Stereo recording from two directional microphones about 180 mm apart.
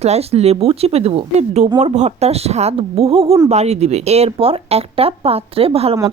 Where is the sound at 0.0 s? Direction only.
35° right (ahead or behind).